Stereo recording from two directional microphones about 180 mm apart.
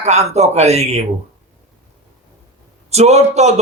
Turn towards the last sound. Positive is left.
turn(degrees=-40)  # may be behind; listen again after turning